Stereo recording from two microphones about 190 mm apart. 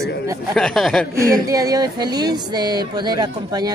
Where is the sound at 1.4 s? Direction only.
20° right (ahead or behind).